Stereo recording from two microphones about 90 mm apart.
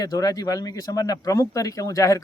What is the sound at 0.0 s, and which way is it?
Speech, 45° left (ahead or behind).